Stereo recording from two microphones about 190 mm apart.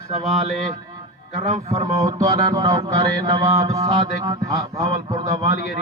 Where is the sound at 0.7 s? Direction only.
20° right (ahead or behind).